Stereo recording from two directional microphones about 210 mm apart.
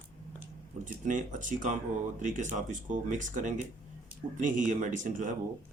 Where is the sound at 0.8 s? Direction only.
35° right (ahead or behind).